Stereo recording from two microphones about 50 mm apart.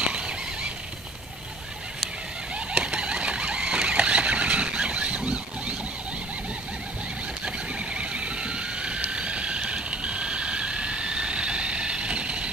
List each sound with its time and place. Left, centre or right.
0.0 s neigh: centre
2.7 s vehicle: centre
7.4 s vehicle: right